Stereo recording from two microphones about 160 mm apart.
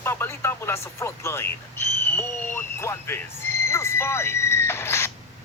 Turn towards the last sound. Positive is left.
turn(degrees=15)  # may be behind; listen again after turning